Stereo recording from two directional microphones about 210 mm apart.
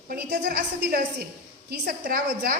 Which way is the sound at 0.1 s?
45° right (ahead or behind).